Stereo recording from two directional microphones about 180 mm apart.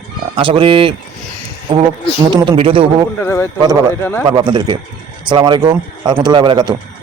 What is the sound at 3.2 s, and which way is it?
Speech, 15° left (ahead or behind).